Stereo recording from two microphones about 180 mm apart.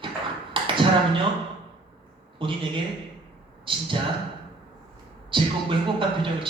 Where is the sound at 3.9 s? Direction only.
30° right (ahead or behind).